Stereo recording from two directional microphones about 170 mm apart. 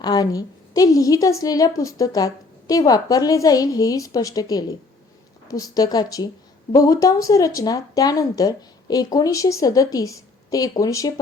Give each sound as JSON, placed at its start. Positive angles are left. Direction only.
{"t": 0.0, "sound": "a woman's voice", "side_deg": 20}